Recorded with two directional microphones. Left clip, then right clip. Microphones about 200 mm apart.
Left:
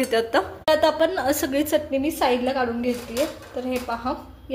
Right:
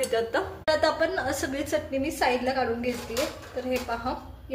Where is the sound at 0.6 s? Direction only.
30° left (ahead or behind).